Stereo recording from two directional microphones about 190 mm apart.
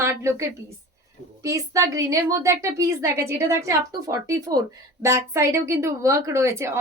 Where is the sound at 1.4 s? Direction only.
15° right (ahead or behind).